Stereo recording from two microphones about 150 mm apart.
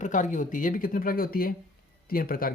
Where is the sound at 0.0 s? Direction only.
55° left (ahead or behind).